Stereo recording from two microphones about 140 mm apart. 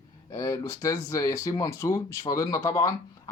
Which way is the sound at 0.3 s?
20° left (ahead or behind).